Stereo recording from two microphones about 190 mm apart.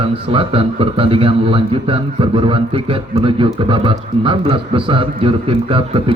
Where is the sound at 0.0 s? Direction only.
30° right (ahead or behind).